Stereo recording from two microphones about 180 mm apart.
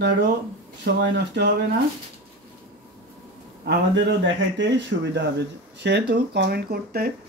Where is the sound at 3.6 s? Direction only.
65° right (ahead or behind).